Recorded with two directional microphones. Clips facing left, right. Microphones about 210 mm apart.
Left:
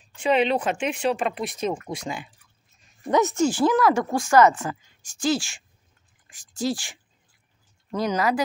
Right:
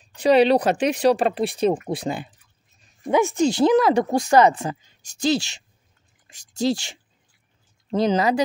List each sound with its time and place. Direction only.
0.1 s speech: 35° right (ahead or behind)
3.1 s speech: 10° right (ahead or behind); by 4.7 s 25° right (ahead or behind)
6.5 s speech: 25° right (ahead or behind)